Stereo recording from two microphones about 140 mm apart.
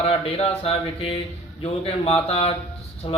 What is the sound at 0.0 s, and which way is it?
Speech, 45° left (ahead or behind).